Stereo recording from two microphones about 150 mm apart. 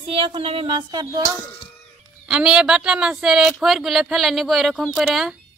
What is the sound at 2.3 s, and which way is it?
Speech, 5° right (ahead or behind).